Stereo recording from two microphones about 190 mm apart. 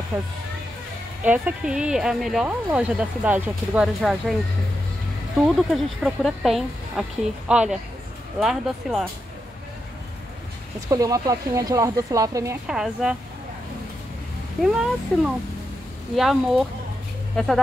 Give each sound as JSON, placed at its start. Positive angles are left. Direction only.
{"t": 0.1, "sound": "speech", "side_deg": -10}
{"t": 5.7, "sound": "speech", "side_deg": 0}
{"t": 10.9, "sound": "speech", "side_deg": -20}
{"t": 12.6, "sound": "speech", "side_deg": -5}
{"t": 14.6, "sound": "speech", "side_deg": -5}